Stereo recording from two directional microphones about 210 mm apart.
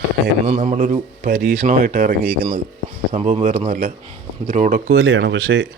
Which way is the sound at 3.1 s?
30° right (ahead or behind).